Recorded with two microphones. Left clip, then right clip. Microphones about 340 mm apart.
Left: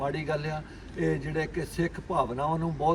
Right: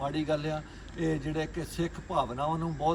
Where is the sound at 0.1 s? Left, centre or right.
Centre.